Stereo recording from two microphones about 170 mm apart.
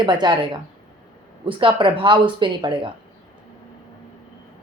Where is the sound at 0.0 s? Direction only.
25° right (ahead or behind).